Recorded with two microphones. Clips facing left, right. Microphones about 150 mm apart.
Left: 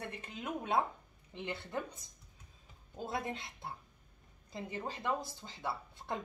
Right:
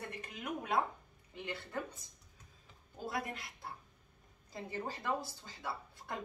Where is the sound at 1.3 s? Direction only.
25° left (ahead or behind).